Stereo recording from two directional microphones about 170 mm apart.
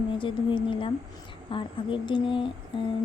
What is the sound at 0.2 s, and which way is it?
Speech, 30° left (ahead or behind).